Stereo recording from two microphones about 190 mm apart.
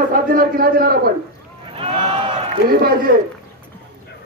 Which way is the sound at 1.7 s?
30° right (ahead or behind).